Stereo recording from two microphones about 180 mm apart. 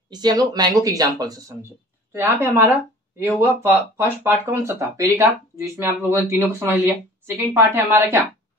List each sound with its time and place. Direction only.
0.1 s speech: 25° right (ahead or behind)
3.7 s speech: 10° right (ahead or behind)